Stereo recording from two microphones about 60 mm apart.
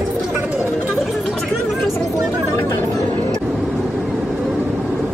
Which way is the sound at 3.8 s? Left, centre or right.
Centre.